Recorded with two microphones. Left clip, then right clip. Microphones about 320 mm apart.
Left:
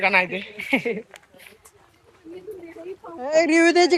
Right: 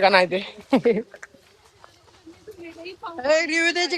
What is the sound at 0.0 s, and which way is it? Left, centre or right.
Speech, right.